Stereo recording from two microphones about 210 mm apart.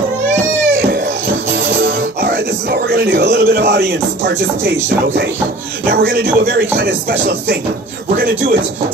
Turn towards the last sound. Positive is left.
turn(degrees=-45)  # may be behind; listen again after turning